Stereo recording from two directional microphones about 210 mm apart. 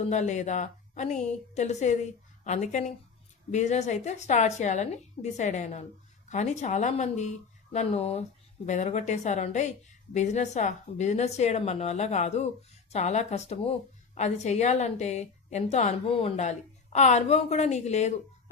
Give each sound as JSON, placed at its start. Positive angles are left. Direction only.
{"t": 0.0, "sound": "a woman's voice", "side_deg": 35}